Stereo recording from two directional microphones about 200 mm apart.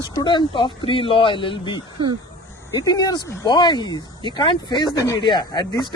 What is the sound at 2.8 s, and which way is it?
Speech, 20° left (ahead or behind).